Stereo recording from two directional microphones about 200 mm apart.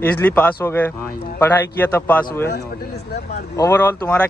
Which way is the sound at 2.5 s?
55° left (ahead or behind).